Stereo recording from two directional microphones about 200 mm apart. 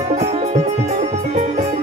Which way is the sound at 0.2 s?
35° right (ahead or behind).